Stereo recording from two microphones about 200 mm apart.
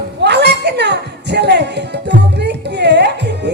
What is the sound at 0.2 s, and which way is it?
Music, 55° right (ahead or behind).